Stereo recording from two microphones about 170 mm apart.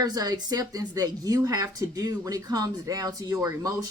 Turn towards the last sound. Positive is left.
turn(degrees=-20)  # may be behind; listen again after turning